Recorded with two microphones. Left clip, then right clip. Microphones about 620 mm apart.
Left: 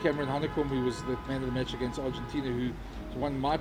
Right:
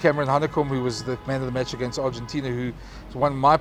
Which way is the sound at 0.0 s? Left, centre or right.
Right.